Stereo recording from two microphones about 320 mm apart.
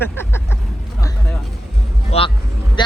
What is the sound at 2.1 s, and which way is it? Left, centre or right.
Speech, centre.